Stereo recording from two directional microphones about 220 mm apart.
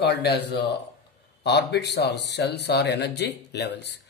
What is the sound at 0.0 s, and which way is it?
Speech, 50° left (ahead or behind).